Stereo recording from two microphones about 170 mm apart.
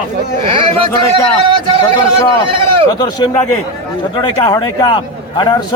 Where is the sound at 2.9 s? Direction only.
25° left (ahead or behind).